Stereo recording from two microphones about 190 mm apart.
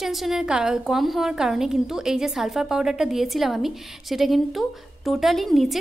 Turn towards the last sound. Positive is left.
turn(degrees=0)  # may be behind; listen again after turning